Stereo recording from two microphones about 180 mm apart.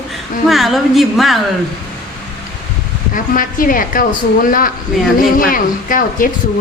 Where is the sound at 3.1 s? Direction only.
50° left (ahead or behind).